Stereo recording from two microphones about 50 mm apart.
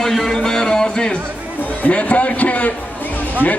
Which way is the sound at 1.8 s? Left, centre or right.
Left.